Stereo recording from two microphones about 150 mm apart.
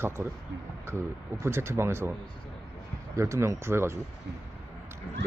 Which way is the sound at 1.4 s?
15° right (ahead or behind).